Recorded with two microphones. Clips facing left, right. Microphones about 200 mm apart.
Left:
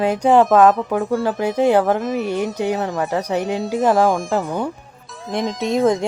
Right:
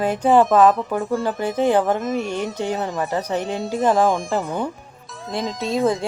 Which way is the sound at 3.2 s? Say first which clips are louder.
Left 3 dB; 15° left (ahead or behind).